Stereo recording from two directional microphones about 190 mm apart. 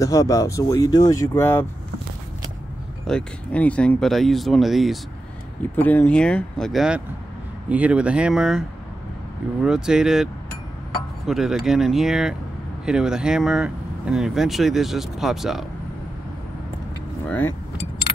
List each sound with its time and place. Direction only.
0.0 s speech: 15° left (ahead or behind)
3.1 s speech: 5° left (ahead or behind)
17.3 s speech: 10° left (ahead or behind)